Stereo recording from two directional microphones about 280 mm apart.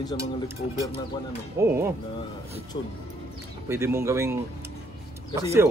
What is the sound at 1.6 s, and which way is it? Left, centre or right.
Speech, centre.